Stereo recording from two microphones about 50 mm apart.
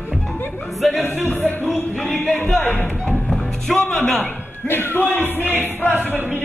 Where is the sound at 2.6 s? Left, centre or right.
Left.